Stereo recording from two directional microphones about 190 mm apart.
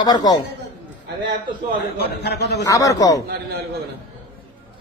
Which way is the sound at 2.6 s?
15° left (ahead or behind).